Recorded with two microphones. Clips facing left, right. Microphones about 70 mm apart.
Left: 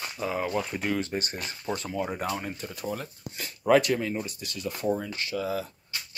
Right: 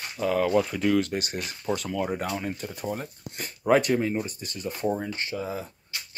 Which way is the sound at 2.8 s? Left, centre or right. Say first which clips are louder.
Right 1 dB; right.